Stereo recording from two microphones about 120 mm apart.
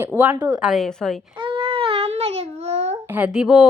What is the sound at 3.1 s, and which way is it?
Speech, 10° right (ahead or behind).